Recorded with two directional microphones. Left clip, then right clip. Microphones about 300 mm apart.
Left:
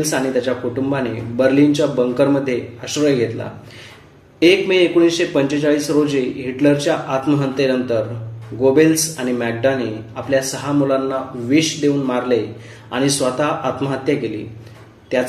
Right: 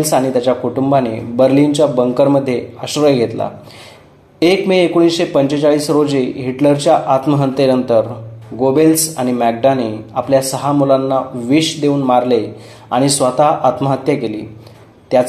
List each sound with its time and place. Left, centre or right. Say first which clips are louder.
0.0 s a man's voice: right 5 dB; right